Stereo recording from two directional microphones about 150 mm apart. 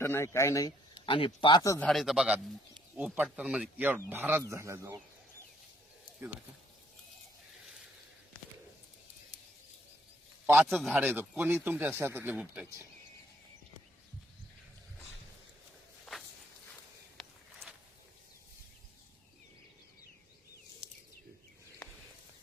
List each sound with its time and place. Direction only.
0.0 s speech: 15° left (ahead or behind)
1.0 s speech: 35° left (ahead or behind)
1.8 s speech: centre (ahead or behind); by 4.9 s 20° right (ahead or behind)
10.7 s speech: centre (ahead or behind)
10.9 s speech: 10° right (ahead or behind)
16.1 s walk: centre (ahead or behind)
17.2 s a sound: centre (ahead or behind)